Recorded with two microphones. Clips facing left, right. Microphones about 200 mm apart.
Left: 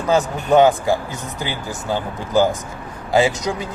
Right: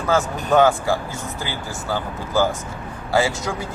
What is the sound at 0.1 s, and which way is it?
Speech, 15° left (ahead or behind).